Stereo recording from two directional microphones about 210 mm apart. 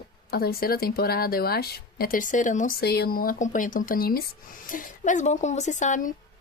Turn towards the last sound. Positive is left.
turn(degrees=35)  # may be behind; listen again after turning